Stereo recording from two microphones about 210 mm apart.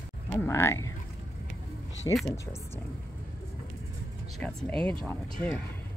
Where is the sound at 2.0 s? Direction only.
15° left (ahead or behind).